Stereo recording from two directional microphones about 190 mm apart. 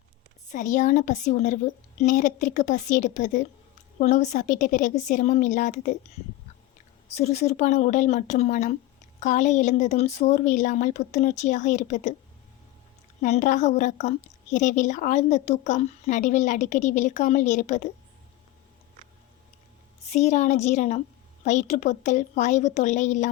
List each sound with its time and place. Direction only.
0.5 s a woman's voice: 40° left (ahead or behind)
7.2 s a woman's voice: 35° left (ahead or behind)
13.2 s a woman's voice: 40° left (ahead or behind)
20.1 s a woman's voice: 35° left (ahead or behind)